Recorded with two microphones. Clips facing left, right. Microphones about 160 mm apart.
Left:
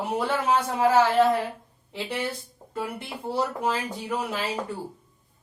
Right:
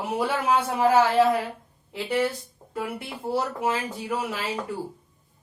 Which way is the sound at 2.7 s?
5° right (ahead or behind).